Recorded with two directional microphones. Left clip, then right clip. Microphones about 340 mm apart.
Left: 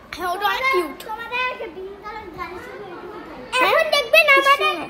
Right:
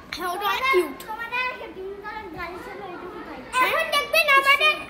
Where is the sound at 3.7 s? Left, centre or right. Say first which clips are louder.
Left 6 dB; left.